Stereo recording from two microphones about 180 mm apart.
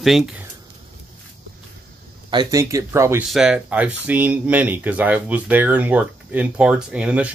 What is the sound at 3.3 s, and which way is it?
Speech, 5° right (ahead or behind).